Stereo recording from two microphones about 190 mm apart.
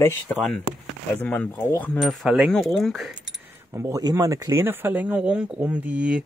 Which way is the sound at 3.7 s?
15° right (ahead or behind).